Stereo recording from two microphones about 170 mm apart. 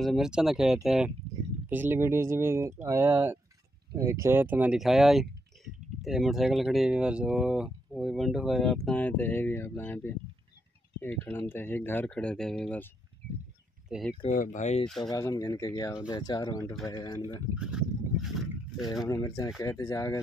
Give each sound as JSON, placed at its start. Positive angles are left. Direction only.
{"t": 0.0, "sound": "speech", "side_deg": 0}
{"t": 13.8, "sound": "speech", "side_deg": -5}
{"t": 14.3, "sound": "speech", "side_deg": 50}
{"t": 15.0, "sound": "speech", "side_deg": 20}
{"t": 17.6, "sound": "boat", "side_deg": -5}
{"t": 19.0, "sound": "speech", "side_deg": 20}